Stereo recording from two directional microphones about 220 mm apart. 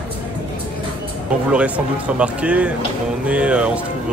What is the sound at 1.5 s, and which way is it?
Speech, 5° right (ahead or behind).